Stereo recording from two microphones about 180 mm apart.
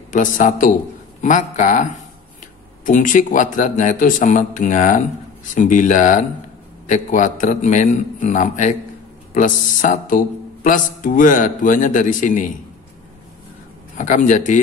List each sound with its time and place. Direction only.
0.1 s speech: 45° left (ahead or behind)
13.9 s speech: 45° left (ahead or behind)